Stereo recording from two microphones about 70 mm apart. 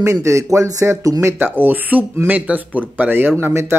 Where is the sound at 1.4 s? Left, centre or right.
Right.